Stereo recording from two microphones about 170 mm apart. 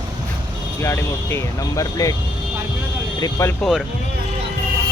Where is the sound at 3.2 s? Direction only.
15° left (ahead or behind).